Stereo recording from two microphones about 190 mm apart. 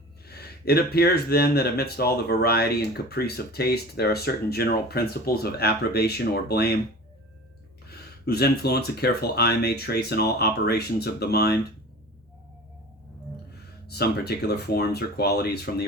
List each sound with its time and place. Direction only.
0.3 s speech: 55° left (ahead or behind)
7.9 s speech: 55° left (ahead or behind)
13.8 s speech: 55° left (ahead or behind)